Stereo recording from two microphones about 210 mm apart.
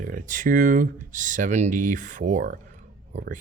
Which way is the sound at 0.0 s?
40° right (ahead or behind).